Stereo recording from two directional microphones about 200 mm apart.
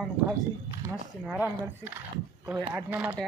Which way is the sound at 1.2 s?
10° right (ahead or behind).